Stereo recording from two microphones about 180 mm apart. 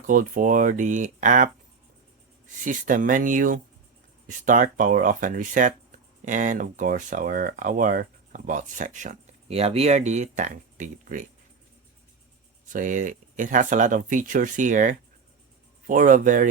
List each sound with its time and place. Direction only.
0.1 s speech: 50° right (ahead or behind)
2.6 s speech: 45° right (ahead or behind)
12.6 s speech: 45° right (ahead or behind)